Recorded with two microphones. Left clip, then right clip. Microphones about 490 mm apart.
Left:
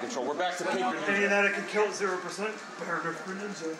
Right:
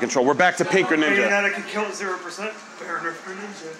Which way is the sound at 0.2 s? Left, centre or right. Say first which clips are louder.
Right 14 dB; right.